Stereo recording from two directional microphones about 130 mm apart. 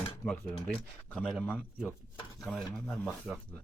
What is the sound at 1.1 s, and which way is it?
Speech, centre (ahead or behind).